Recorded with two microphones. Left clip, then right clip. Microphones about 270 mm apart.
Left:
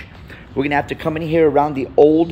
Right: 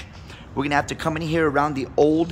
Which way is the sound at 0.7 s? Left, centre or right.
Right.